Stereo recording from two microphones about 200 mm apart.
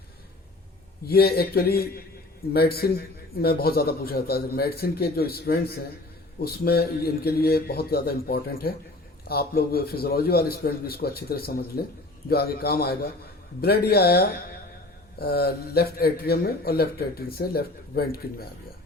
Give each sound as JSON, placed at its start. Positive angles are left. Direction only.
{"t": 1.0, "sound": "a man's voice", "side_deg": 50}